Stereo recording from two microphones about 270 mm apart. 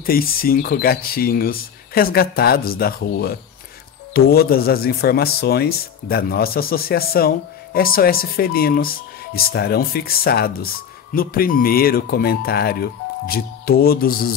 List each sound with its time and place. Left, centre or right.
0.0 s speech: left